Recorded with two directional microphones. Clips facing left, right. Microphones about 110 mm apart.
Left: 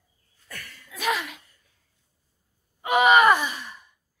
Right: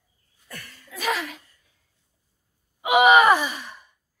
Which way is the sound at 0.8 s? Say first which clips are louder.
Even; centre (ahead or behind).